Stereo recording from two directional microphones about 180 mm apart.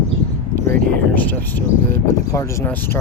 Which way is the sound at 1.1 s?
10° left (ahead or behind).